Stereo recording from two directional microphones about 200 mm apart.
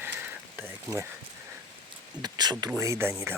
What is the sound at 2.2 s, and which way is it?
Speech, 20° right (ahead or behind).